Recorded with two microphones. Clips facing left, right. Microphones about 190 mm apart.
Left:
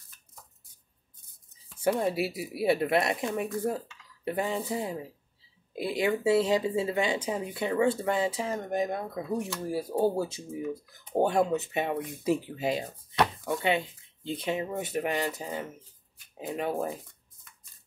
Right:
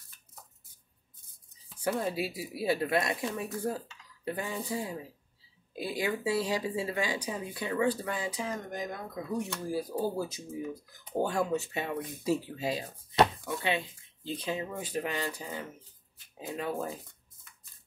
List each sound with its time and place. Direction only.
1.8 s speech: 25° left (ahead or behind)